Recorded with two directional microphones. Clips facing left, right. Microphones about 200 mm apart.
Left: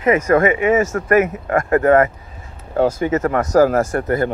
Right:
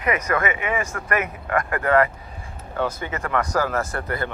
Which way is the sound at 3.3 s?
45° left (ahead or behind).